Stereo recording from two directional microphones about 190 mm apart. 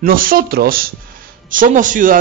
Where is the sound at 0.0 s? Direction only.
50° right (ahead or behind).